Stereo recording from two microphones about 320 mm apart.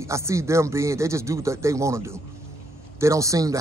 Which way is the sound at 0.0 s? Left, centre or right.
Centre.